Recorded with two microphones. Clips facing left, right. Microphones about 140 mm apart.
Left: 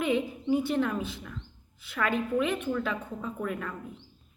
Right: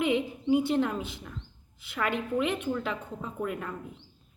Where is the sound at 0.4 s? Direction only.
20° right (ahead or behind).